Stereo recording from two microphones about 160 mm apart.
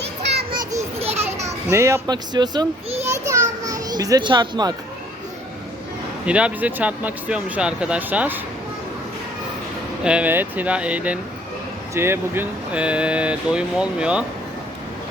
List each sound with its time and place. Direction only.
0.2 s children playing: 90° right
0.6 s children playing: 20° right (ahead or behind)
0.9 s children playing: 40° right (ahead or behind)
1.5 s speech: 20° right (ahead or behind)
3.2 s children playing: 20° right (ahead or behind)
6.2 s speech: 5° right (ahead or behind)
10.0 s speech: 5° right (ahead or behind)